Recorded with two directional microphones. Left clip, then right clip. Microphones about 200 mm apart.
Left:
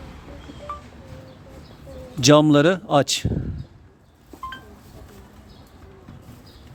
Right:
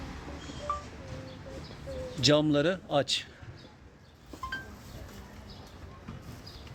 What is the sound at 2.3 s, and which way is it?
Speech, 45° left (ahead or behind).